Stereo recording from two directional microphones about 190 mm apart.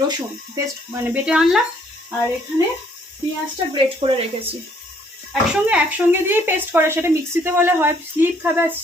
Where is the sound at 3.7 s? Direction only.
30° right (ahead or behind).